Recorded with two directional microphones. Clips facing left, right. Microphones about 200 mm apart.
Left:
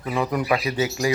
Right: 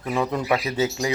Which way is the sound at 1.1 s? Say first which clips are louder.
Left 6 dB; 20° right (ahead or behind).